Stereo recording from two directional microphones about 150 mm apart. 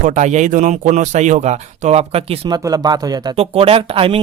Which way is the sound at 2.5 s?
25° right (ahead or behind).